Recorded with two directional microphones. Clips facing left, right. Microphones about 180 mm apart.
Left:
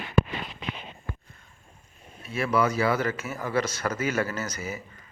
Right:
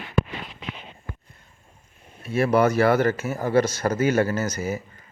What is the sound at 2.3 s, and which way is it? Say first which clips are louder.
A man's voice: right 6 dB; 45° right (ahead or behind).